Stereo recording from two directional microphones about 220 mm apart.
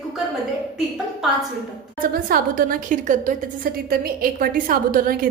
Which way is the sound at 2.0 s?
40° right (ahead or behind).